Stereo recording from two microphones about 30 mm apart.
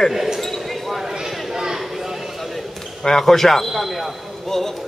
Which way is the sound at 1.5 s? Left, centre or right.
Centre.